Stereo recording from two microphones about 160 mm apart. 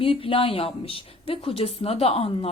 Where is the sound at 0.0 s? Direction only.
35° left (ahead or behind).